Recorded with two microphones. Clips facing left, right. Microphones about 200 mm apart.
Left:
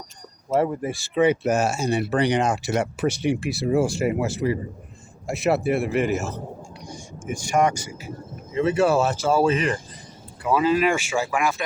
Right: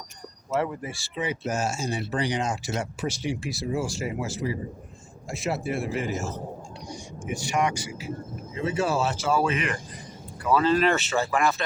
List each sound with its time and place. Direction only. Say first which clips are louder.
0.5 s speech: left 6 dB; 45° left (ahead or behind); by 6.3 s 65° left (ahead or behind)
6.8 s speech: left 3 dB; 50° left (ahead or behind)
8.5 s speech: left 6 dB; 65° left (ahead or behind); by 9.7 s 35° left (ahead or behind)
10.4 s speech: left 2 dB; 10° left (ahead or behind)